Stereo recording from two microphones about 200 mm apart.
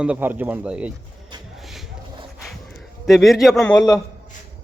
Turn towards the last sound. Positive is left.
turn(degrees=5)  # may be behind; listen again after turning